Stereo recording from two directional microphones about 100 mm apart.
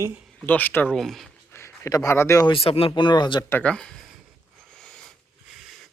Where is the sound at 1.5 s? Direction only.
30° left (ahead or behind).